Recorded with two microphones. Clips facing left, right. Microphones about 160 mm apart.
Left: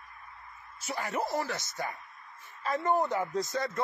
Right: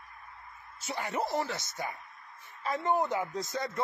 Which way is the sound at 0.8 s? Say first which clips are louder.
Even; 20° right (ahead or behind).